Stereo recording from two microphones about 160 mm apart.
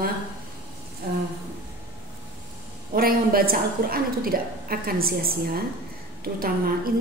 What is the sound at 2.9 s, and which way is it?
A woman's voice, 65° right (ahead or behind).